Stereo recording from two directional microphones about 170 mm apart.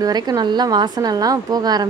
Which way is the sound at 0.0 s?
25° right (ahead or behind).